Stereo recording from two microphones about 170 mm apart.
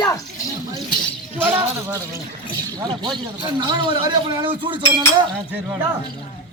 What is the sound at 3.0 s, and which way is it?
A man's voice, 25° right (ahead or behind).